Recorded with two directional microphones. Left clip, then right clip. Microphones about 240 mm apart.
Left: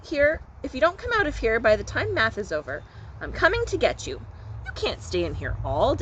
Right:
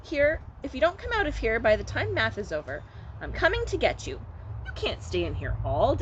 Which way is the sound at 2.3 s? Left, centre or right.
Centre.